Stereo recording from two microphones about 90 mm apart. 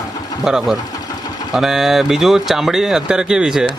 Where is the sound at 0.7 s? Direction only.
45° left (ahead or behind).